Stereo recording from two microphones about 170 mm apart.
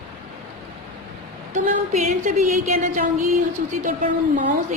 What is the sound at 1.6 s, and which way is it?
A woman's voice, 40° right (ahead or behind).